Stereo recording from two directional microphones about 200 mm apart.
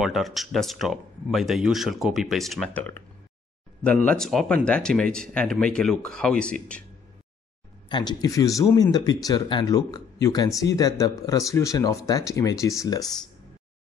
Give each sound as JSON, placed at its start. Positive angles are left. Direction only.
{"t": 0.0, "sound": "speech", "side_deg": 0}
{"t": 7.9, "sound": "speech", "side_deg": 20}